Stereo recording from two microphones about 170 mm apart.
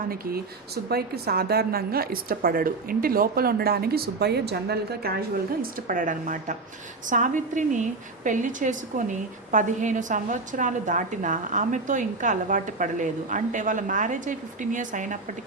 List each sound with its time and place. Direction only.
0.1 s a woman's voice: 60° right (ahead or behind)
5.9 s a woman's voice: 50° right (ahead or behind)